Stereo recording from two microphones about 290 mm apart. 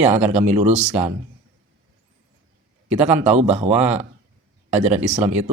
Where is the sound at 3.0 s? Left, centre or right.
Right.